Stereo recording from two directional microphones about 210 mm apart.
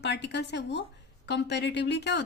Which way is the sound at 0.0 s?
55° left (ahead or behind).